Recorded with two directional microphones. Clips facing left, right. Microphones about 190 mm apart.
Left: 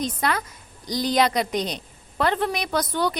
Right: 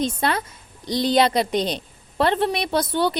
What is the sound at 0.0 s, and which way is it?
A woman's voice, 30° right (ahead or behind).